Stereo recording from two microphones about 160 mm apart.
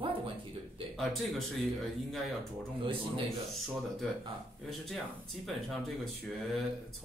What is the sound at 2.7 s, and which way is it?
Speech, 35° right (ahead or behind).